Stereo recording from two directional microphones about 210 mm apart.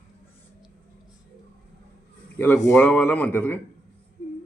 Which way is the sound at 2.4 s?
10° left (ahead or behind).